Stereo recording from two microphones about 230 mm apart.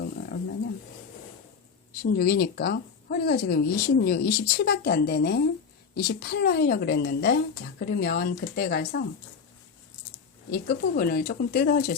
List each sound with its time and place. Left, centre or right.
0.0 s roaring cats: left
2.0 s a woman's voice: left
10.5 s speech: left